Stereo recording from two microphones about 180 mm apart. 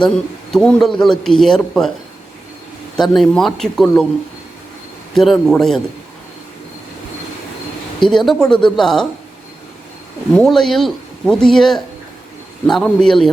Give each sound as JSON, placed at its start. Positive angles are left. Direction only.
{"t": 0.0, "sound": "a man's voice", "side_deg": 5}
{"t": 3.0, "sound": "a man's voice", "side_deg": 0}
{"t": 5.1, "sound": "a man's voice", "side_deg": 0}
{"t": 8.0, "sound": "a man's voice", "side_deg": 0}
{"t": 10.3, "sound": "a man's voice", "side_deg": 5}